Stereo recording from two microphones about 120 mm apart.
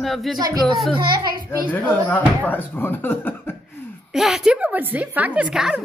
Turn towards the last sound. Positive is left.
turn(degrees=-5)  # may be behind; listen again after turning